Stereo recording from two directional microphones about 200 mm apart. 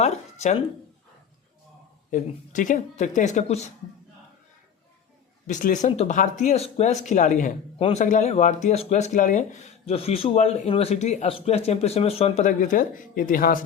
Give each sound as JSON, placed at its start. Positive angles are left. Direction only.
{"t": 0.0, "sound": "speech", "side_deg": 35}
{"t": 2.0, "sound": "speech", "side_deg": 40}
{"t": 5.5, "sound": "speech", "side_deg": 40}